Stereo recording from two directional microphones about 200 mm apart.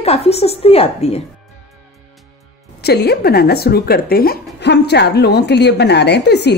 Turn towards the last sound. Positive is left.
turn(degrees=55)  # may be behind; listen again after turning